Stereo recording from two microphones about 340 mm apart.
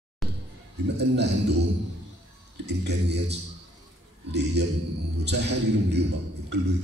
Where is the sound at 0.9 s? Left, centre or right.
Right.